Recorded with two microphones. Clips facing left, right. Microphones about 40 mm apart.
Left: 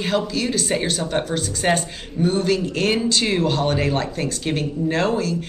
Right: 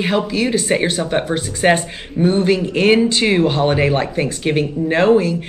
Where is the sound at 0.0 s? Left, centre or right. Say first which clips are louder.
Right 4 dB; right.